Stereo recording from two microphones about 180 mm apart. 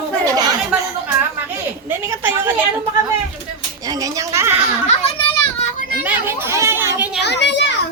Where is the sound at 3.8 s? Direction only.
20° right (ahead or behind).